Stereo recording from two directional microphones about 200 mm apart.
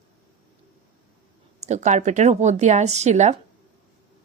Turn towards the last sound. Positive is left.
turn(degrees=-35)  # may be behind; listen again after turning